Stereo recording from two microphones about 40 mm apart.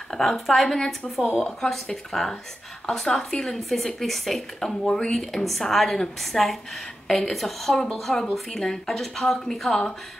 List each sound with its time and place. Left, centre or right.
0.1 s a woman's voice: centre
4.8 s speech: centre
5.1 s a woman's voice: centre
7.7 s speech: centre